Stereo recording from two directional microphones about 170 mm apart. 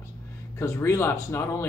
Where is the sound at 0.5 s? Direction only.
15° left (ahead or behind).